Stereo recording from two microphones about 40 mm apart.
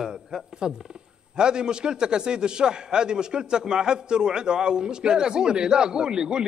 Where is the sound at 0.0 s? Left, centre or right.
Centre.